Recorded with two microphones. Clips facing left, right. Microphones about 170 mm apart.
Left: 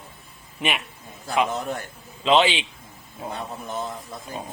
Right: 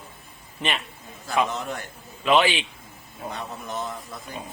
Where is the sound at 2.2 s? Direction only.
20° left (ahead or behind).